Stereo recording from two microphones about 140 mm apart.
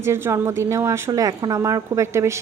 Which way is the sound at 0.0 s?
20° right (ahead or behind).